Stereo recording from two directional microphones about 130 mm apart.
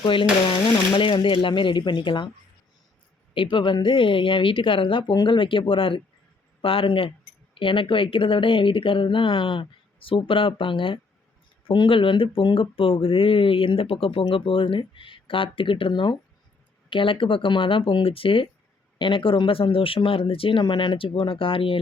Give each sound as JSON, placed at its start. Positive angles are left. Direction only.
{"t": 0.0, "sound": "speech", "side_deg": 40}
{"t": 3.3, "sound": "speech", "side_deg": 40}